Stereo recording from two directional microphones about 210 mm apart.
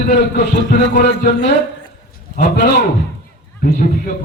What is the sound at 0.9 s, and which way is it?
Speech, 55° left (ahead or behind).